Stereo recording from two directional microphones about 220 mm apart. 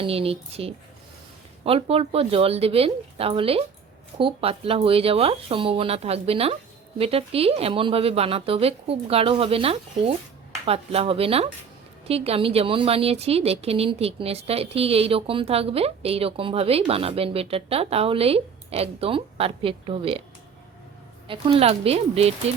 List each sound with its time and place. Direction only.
0.0 s a woman's voice: 25° right (ahead or behind)
21.2 s a woman's voice: 25° right (ahead or behind)